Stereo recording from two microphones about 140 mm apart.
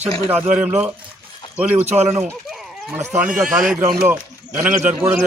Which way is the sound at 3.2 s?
5° right (ahead or behind).